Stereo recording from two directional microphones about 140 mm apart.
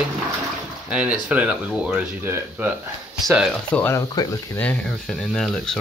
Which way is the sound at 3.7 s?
15° left (ahead or behind).